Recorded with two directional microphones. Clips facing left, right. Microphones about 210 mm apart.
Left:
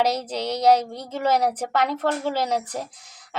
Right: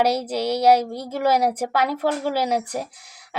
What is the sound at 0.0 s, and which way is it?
A woman's voice, 10° right (ahead or behind).